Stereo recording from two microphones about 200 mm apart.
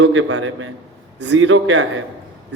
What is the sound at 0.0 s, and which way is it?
A man's voice, 75° right (ahead or behind).